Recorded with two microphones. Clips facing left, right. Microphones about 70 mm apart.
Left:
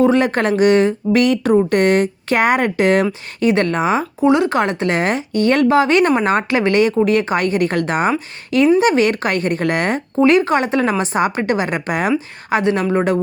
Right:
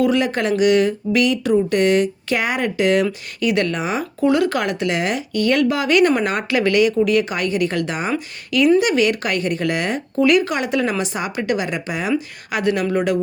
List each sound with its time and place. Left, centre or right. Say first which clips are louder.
0.0 s speech: left 4 dB; left
4.2 s speech: left 2 dB; left
10.2 s speech: left 3 dB; left
12.5 s speech: left 3 dB; left